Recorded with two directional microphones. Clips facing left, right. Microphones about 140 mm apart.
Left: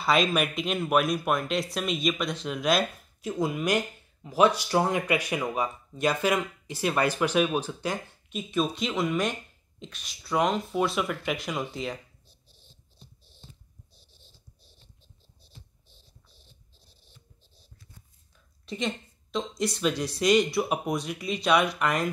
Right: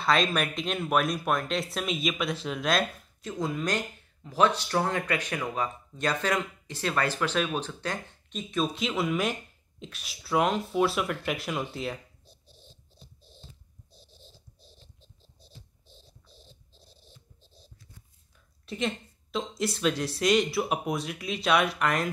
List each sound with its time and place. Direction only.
0.0 s speech: 5° left (ahead or behind)
16.3 s a sound: 90° right
18.7 s speech: 5° right (ahead or behind)